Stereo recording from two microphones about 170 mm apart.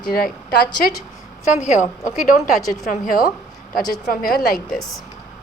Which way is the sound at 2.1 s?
Centre (ahead or behind).